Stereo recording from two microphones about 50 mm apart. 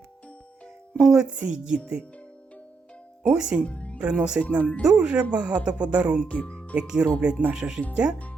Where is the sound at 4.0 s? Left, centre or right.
Right.